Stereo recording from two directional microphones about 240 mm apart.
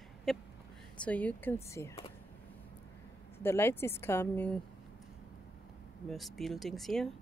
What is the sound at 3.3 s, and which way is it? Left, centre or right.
A woman's voice, centre.